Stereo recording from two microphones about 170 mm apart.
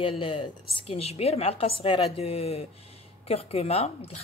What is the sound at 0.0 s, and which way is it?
A woman's voice, 30° left (ahead or behind).